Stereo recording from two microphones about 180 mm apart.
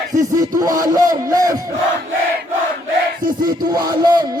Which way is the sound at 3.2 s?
25° right (ahead or behind).